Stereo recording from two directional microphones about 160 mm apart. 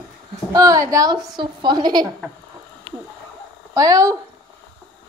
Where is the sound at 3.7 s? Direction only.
20° right (ahead or behind).